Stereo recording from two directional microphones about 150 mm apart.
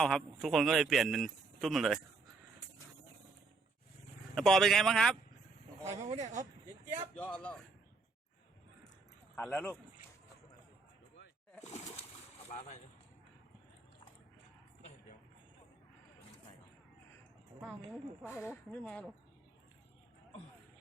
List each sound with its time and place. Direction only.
0.0 s speech: centre (ahead or behind)
4.4 s speech: centre (ahead or behind)
5.8 s speech: 45° right (ahead or behind)
7.2 s speech: 10° left (ahead or behind)
9.3 s speech: 10° left (ahead or behind)
12.5 s speech: 50° left (ahead or behind)
18.3 s speech: 15° left (ahead or behind)